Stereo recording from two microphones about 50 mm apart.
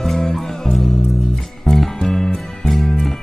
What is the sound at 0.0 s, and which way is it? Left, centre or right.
Music, centre.